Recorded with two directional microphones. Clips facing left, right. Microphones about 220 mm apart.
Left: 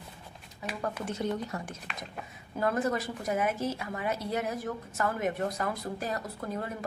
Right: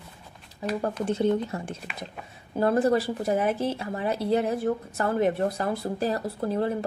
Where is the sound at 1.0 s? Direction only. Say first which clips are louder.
Right 10 dB; 30° right (ahead or behind).